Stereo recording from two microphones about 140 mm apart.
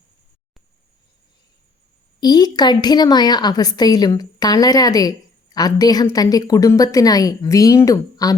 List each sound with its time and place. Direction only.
2.2 s a woman's voice: 30° left (ahead or behind)